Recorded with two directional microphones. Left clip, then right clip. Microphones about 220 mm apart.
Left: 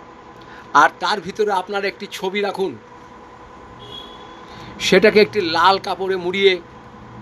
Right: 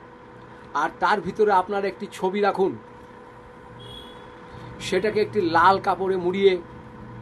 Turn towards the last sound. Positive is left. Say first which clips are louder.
# left 4 dB
turn(degrees=30)  # may be behind; listen again after turning